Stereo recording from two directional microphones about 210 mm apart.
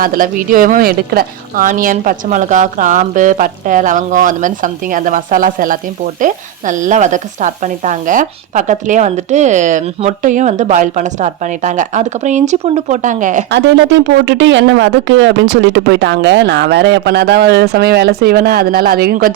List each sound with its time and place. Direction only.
0.0 s a woman's voice: 40° right (ahead or behind)
13.5 s speech: 60° right (ahead or behind)